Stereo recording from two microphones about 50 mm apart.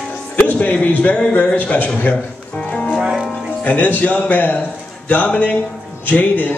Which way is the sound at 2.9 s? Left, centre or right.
Centre.